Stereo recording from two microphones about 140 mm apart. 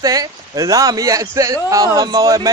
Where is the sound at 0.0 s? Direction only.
25° right (ahead or behind).